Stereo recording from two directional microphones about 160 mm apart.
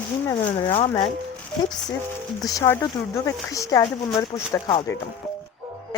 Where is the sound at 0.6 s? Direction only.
35° left (ahead or behind).